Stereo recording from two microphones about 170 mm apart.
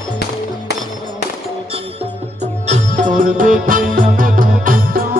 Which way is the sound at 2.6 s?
45° right (ahead or behind).